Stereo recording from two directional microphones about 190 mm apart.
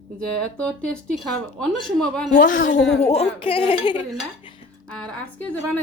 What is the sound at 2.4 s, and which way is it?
Speech, 45° left (ahead or behind).